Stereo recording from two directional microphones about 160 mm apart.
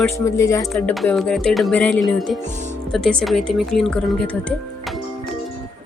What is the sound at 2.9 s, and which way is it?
Speech, centre (ahead or behind).